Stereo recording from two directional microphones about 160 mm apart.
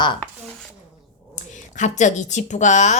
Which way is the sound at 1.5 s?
50° left (ahead or behind).